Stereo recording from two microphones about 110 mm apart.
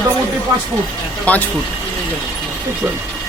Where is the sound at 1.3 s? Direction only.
15° left (ahead or behind).